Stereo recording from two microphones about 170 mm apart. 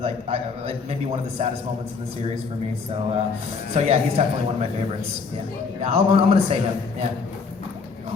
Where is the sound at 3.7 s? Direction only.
40° right (ahead or behind).